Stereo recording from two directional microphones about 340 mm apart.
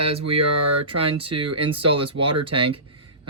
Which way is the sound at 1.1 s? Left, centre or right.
Centre.